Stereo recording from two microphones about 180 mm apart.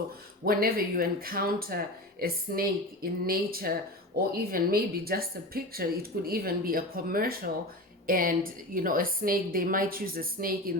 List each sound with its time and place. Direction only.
0.4 s a woman's voice: 55° right (ahead or behind)